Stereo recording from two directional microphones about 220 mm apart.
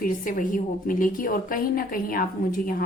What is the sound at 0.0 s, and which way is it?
A woman's voice, 35° left (ahead or behind).